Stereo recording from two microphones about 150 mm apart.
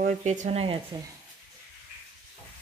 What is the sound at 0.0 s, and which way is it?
Speech, 50° right (ahead or behind).